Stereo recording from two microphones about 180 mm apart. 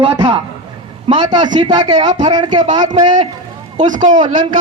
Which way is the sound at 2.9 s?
40° right (ahead or behind).